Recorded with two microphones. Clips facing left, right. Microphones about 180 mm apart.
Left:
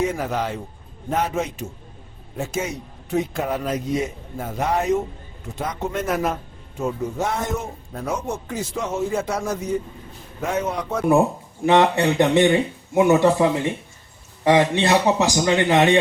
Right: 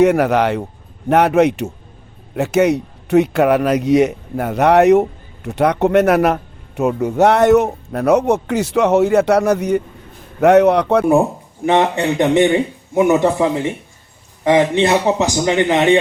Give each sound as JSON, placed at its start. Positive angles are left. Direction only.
{"t": 0.0, "sound": "a man's voice", "side_deg": -70}
{"t": 11.6, "sound": "a man's voice", "side_deg": -20}
{"t": 14.4, "sound": "a man's voice", "side_deg": -20}